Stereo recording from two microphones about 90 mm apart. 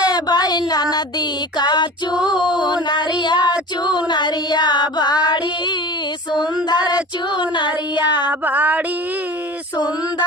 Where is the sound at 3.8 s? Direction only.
55° left (ahead or behind).